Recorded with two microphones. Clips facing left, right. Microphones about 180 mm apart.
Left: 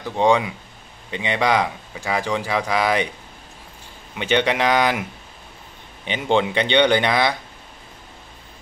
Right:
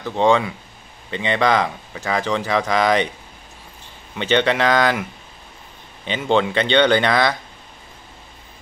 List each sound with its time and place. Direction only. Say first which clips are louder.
0.0 s speech: right 1 dB; 15° left (ahead or behind)
4.1 s speech: right 2 dB; 15° left (ahead or behind)
6.0 s speech: right 1 dB; 15° left (ahead or behind)